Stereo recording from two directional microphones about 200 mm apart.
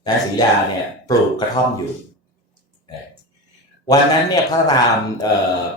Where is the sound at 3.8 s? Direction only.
20° left (ahead or behind).